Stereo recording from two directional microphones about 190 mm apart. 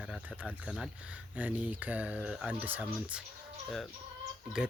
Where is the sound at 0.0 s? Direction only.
5° right (ahead or behind).